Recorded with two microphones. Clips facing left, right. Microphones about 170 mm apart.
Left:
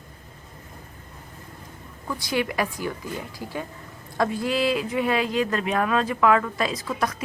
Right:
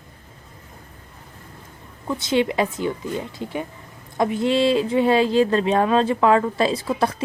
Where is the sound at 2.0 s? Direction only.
25° right (ahead or behind).